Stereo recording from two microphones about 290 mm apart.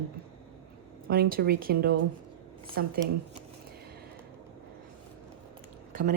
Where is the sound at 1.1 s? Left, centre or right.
Right.